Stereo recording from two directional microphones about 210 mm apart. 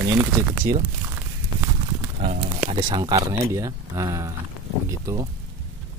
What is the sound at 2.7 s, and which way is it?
Speech, 25° right (ahead or behind).